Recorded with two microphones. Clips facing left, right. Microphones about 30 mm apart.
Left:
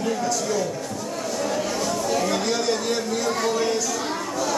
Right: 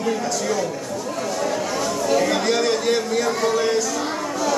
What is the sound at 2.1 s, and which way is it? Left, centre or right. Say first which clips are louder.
A man's voice: right 6 dB; right.